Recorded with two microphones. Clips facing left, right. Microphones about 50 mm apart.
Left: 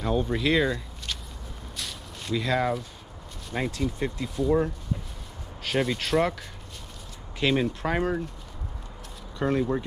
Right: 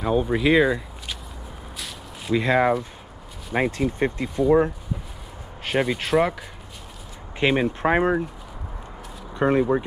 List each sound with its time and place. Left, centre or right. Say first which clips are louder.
0.0 s speech: right 5 dB; centre
1.8 s a sound: even; centre
2.3 s speech: right 6 dB; right; by 6.3 s centre
7.3 s speech: right 4 dB; right
9.3 s speech: right 6 dB; right